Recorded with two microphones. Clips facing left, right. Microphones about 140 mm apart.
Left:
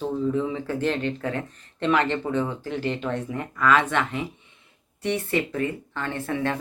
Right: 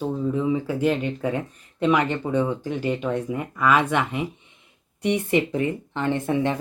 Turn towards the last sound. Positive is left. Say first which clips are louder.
# right 4 dB
turn(degrees=-20)  # may be behind; listen again after turning